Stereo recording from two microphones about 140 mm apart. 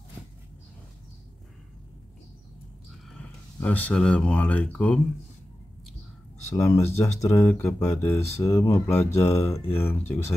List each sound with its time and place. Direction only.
3.6 s speech: 10° left (ahead or behind)
6.4 s speech: 20° left (ahead or behind)